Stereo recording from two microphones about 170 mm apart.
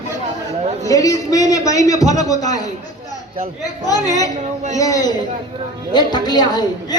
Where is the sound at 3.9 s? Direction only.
20° left (ahead or behind).